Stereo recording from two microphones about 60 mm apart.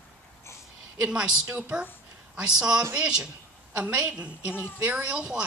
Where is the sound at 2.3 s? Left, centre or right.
Centre.